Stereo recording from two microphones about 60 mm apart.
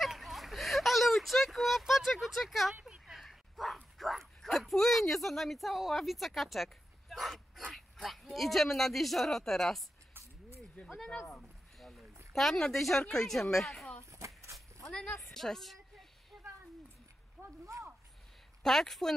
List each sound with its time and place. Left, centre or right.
0.0 s a sound: centre
2.8 s bow-wow: centre
7.7 s speech: centre
10.9 s speech: centre
12.3 s a woman's voice: centre
14.1 s a sound: right
14.9 s a woman's voice: centre
15.1 s a sound: centre
18.6 s speech: centre